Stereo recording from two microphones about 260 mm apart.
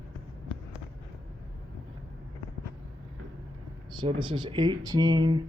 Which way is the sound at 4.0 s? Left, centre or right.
Centre.